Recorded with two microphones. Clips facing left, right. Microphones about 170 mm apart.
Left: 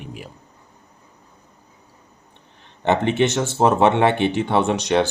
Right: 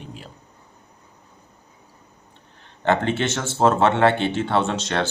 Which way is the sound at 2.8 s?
20° left (ahead or behind).